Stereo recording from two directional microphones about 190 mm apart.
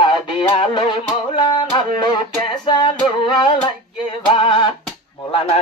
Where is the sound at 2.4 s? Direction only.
25° left (ahead or behind).